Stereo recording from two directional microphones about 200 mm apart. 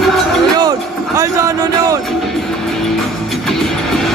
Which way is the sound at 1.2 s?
15° right (ahead or behind).